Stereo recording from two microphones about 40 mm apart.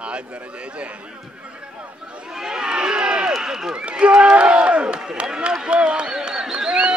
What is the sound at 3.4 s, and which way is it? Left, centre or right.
Speech, centre.